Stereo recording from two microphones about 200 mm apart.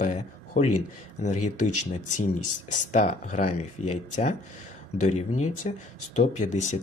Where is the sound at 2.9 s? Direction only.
35° left (ahead or behind).